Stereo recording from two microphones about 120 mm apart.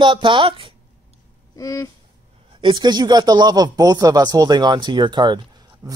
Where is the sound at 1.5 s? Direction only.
30° left (ahead or behind).